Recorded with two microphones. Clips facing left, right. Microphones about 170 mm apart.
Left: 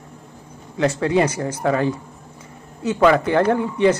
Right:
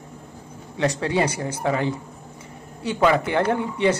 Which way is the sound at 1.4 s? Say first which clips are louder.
Left 3 dB; 15° right (ahead or behind).